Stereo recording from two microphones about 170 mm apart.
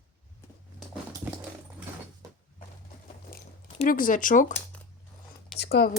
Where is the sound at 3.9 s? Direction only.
55° left (ahead or behind).